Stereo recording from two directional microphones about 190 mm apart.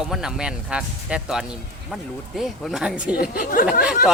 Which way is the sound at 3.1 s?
50° left (ahead or behind).